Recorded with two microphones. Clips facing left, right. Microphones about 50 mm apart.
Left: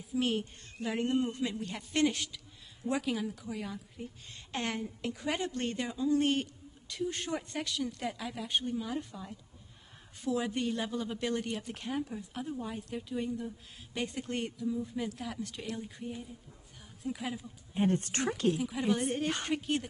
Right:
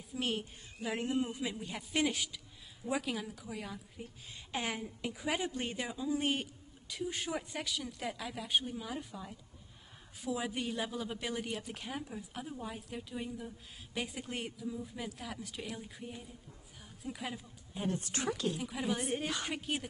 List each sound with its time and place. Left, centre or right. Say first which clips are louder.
0.1 s a woman's voice: left 5 dB; centre
17.7 s a woman's voice: left 7 dB; left
18.5 s a woman's voice: left 6 dB; centre